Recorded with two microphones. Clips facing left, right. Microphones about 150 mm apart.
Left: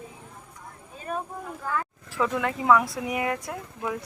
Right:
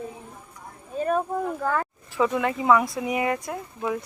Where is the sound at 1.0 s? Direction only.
55° right (ahead or behind).